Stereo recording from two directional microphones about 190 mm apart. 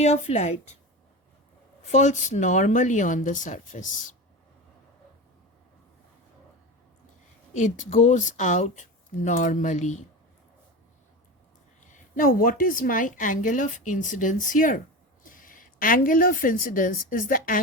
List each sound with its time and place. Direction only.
0.0 s speech: 35° left (ahead or behind)
1.8 s speech: 40° left (ahead or behind)
7.5 s speech: 40° left (ahead or behind)
11.8 s a woman's voice: 45° left (ahead or behind)